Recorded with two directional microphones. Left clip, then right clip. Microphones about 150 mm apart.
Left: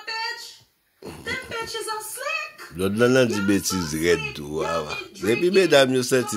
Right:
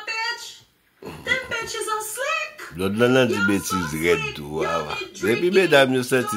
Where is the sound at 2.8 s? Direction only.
50° left (ahead or behind).